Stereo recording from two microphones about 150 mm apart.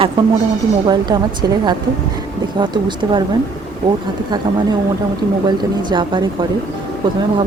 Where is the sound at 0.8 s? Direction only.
30° right (ahead or behind).